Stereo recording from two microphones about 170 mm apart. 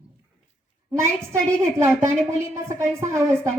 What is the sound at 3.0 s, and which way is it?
Speech, 15° right (ahead or behind).